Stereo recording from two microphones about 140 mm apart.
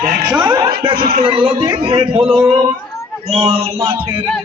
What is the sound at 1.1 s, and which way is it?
Speech, 40° right (ahead or behind).